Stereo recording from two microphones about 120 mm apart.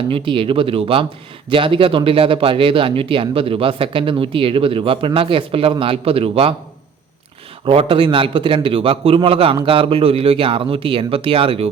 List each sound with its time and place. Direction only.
0.1 s speech: 45° right (ahead or behind)
7.6 s speech: 50° right (ahead or behind)